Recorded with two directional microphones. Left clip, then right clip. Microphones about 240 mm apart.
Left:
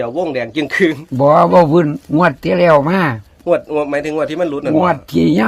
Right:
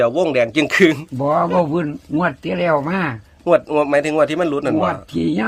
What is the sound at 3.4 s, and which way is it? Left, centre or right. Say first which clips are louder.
Speech: even; right.